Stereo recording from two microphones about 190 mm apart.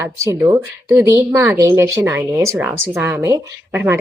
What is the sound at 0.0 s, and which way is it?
A woman's voice, 15° right (ahead or behind).